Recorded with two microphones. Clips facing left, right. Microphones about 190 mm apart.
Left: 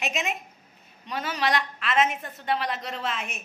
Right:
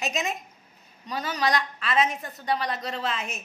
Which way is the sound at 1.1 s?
Centre (ahead or behind).